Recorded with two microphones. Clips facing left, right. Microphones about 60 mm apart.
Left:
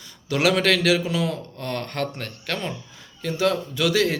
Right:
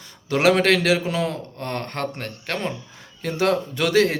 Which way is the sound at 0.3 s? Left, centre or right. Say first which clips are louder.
Right 3 dB; right.